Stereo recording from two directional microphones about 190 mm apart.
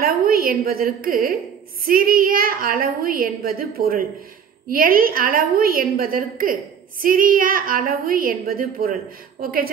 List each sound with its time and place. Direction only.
0.0 s a woman's voice: 50° right (ahead or behind)